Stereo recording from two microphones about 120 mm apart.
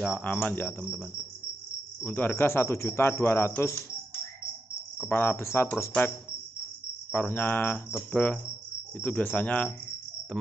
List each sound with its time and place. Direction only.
0.0 s speech: 15° left (ahead or behind)
2.0 s speech: 15° left (ahead or behind)
4.9 s speech: 20° left (ahead or behind)
10.3 s cricket: 5° left (ahead or behind)